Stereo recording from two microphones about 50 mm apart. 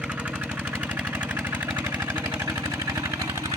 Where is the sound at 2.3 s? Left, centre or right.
Right.